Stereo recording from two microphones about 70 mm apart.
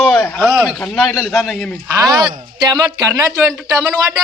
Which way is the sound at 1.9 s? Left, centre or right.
Right.